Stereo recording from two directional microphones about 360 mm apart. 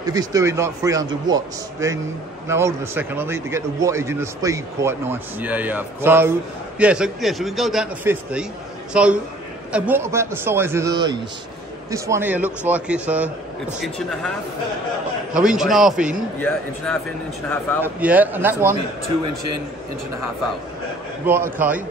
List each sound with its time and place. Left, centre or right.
0.0 s a man's voice: centre
15.3 s a man's voice: centre
19.2 s a man's voice: right
21.5 s a man's voice: centre